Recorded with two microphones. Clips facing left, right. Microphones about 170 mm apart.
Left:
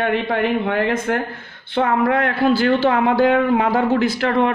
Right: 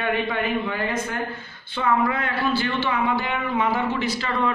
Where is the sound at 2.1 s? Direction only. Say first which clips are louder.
Left 7 dB; 70° left (ahead or behind).